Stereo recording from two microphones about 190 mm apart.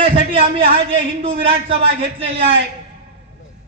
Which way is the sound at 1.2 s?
30° right (ahead or behind).